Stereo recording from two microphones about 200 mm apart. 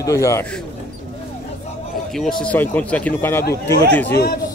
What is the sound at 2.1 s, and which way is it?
A man's voice, centre (ahead or behind).